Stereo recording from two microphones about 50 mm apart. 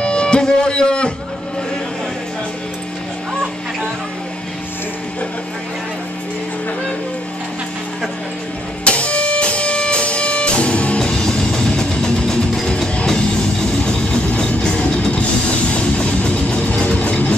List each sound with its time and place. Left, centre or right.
0.0 s music: left
8.8 s music: left
11.0 s music: centre
14.3 s music: centre
16.0 s vehicle: left